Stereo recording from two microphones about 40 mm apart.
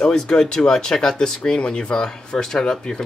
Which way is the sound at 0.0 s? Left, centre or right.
Centre.